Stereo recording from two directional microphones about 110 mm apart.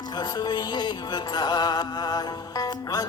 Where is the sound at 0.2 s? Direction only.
40° left (ahead or behind).